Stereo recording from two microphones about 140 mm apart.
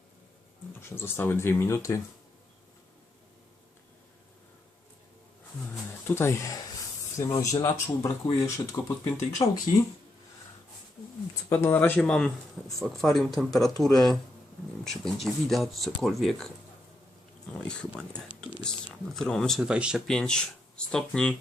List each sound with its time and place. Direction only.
0.8 s speech: 15° left (ahead or behind)
6.1 s speech: 20° left (ahead or behind)
9.4 s speech: 35° left (ahead or behind)
11.4 s speech: 15° left (ahead or behind); by 16.5 s centre (ahead or behind)
17.5 s speech: 5° left (ahead or behind)
20.1 s speech: 5° left (ahead or behind)